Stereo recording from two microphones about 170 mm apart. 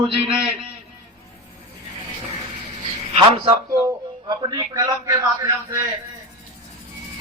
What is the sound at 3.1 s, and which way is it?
A man's voice, 35° right (ahead or behind).